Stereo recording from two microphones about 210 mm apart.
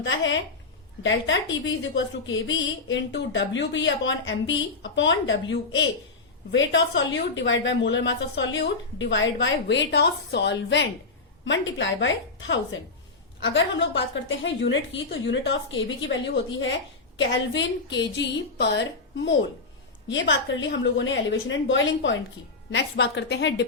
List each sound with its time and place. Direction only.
0.0 s a woman's voice: 60° left (ahead or behind)